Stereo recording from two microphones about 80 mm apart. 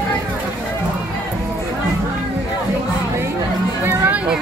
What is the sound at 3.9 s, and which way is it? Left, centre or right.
Music, centre.